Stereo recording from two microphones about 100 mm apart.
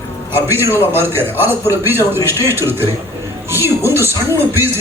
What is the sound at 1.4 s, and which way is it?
A man's voice, 20° right (ahead or behind).